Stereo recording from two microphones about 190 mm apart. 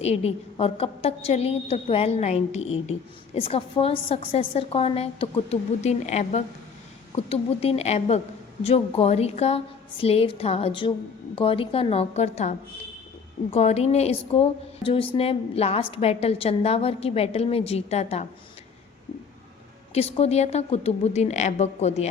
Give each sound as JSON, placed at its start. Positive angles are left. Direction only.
{"t": 0.0, "sound": "a woman's voice", "side_deg": 35}
{"t": 19.9, "sound": "a woman's voice", "side_deg": 35}